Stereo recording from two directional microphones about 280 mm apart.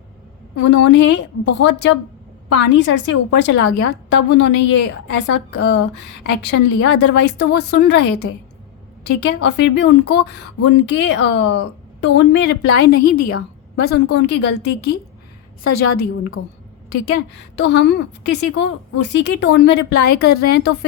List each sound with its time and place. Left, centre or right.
0.5 s a woman's voice: left
17.6 s a woman's voice: left